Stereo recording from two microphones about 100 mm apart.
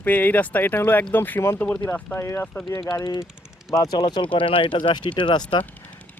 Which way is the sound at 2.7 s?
50° left (ahead or behind).